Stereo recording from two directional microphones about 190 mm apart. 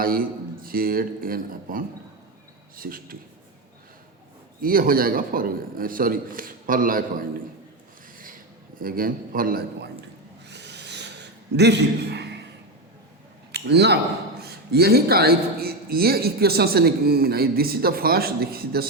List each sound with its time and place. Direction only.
0.0 s a man's voice: 50° right (ahead or behind)
4.6 s a man's voice: 50° right (ahead or behind)
8.8 s a man's voice: 50° right (ahead or behind)
10.5 s owl: 65° right (ahead or behind)
11.5 s a man's voice: 60° right (ahead or behind)
13.5 s a man's voice: 60° right (ahead or behind)